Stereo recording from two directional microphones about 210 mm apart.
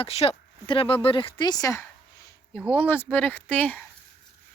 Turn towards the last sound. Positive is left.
turn(degrees=10)  # may be behind; listen again after turning